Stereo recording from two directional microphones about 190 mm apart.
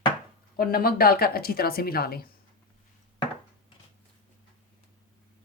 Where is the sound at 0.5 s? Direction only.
50° left (ahead or behind).